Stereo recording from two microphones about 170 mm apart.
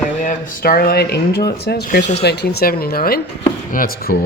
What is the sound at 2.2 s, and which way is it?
Speech, 75° left (ahead or behind).